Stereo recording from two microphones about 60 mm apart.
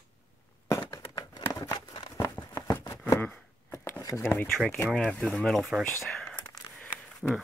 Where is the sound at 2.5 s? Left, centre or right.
Left.